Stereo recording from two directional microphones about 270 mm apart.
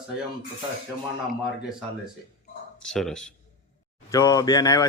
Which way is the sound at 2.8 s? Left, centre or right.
Centre.